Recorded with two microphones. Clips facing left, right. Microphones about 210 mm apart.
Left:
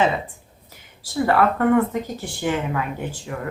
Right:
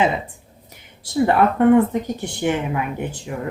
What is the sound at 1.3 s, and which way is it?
Speech, 20° right (ahead or behind).